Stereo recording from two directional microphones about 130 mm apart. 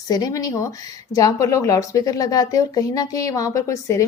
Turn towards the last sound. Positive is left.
turn(degrees=25)  # may be behind; listen again after turning